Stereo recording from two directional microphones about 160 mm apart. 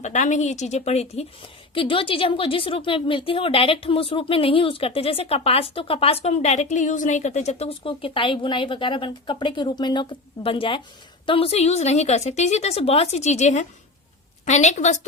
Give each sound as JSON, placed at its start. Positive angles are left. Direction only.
{"t": 0.0, "sound": "a woman's voice", "side_deg": 50}